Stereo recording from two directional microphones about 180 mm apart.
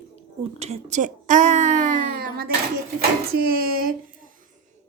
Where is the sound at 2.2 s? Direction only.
55° right (ahead or behind).